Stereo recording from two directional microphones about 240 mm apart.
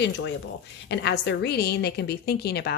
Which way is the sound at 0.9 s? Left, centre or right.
Left.